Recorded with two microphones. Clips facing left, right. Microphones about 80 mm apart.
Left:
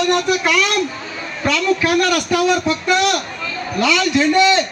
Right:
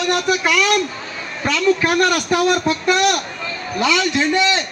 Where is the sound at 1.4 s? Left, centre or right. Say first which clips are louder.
Even; centre.